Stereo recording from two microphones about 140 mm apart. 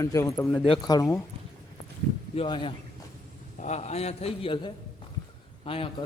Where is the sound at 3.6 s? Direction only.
50° left (ahead or behind).